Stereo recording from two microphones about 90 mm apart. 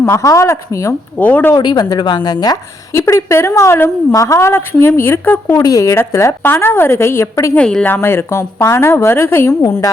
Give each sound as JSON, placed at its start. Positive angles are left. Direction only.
{"t": 0.0, "sound": "a woman's voice", "side_deg": 35}
{"t": 1.2, "sound": "a woman's voice", "side_deg": 20}
{"t": 1.5, "sound": "a woman's voice", "side_deg": 50}
{"t": 3.1, "sound": "a woman's voice", "side_deg": 35}
{"t": 5.6, "sound": "a woman's voice", "side_deg": 40}
{"t": 7.5, "sound": "speech", "side_deg": 10}
{"t": 7.9, "sound": "a woman's voice", "side_deg": 25}